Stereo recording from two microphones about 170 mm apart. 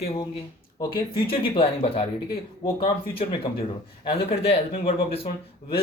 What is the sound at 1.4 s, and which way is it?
Speech, 35° left (ahead or behind).